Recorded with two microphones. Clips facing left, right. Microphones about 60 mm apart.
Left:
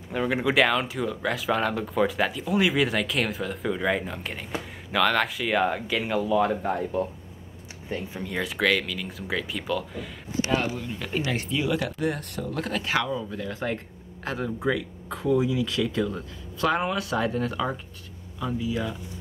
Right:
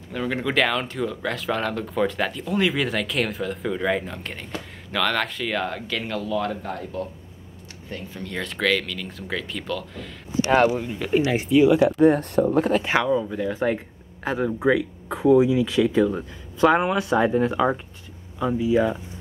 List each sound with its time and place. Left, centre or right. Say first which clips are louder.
0.1 s speech: left 1 dB; centre
10.5 s speech: right 9 dB; right
10.8 s speech: right 8 dB; centre
12.0 s speech: right 11 dB; right